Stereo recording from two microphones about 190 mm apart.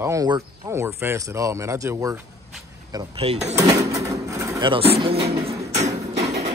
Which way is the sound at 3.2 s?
35° right (ahead or behind).